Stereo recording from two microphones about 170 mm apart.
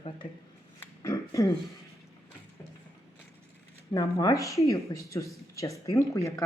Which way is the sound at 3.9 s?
20° left (ahead or behind).